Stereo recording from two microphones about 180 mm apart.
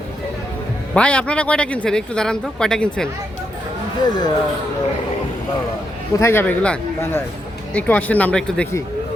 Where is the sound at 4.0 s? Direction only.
20° left (ahead or behind).